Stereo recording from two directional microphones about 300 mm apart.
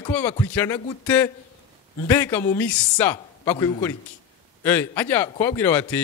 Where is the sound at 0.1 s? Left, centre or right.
Centre.